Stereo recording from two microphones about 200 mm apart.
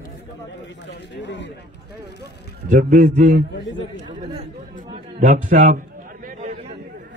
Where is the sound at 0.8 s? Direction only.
60° left (ahead or behind).